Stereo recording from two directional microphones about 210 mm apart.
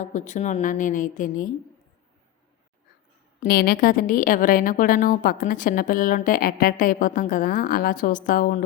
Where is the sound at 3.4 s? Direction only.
45° left (ahead or behind).